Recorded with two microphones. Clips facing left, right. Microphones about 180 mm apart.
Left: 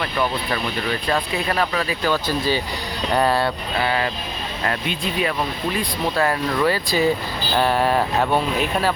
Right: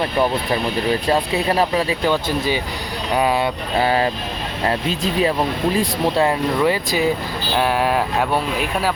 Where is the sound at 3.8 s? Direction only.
35° right (ahead or behind); by 7.0 s 20° right (ahead or behind).